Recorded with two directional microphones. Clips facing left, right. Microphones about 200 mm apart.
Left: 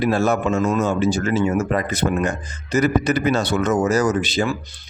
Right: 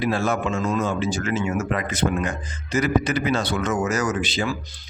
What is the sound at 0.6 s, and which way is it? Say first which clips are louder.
Speech: left 4 dB; 75° left (ahead or behind).